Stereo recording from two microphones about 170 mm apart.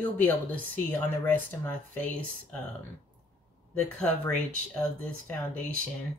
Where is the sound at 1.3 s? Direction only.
10° left (ahead or behind).